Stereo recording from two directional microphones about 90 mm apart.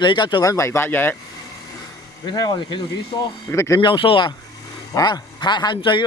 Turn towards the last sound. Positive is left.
turn(degrees=60)  # may be behind; listen again after turning